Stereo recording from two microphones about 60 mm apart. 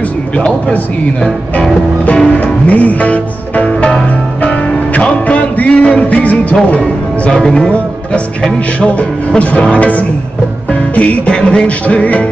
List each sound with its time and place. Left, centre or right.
1.2 s speech: centre
2.0 s music: centre
6.7 s music: centre